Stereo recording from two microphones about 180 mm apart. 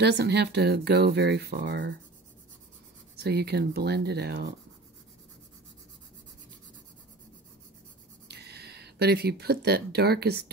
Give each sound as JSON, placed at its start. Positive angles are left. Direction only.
{"t": 0.0, "sound": "speech", "side_deg": -70}
{"t": 3.2, "sound": "speech", "side_deg": -65}
{"t": 8.3, "sound": "speech", "side_deg": -65}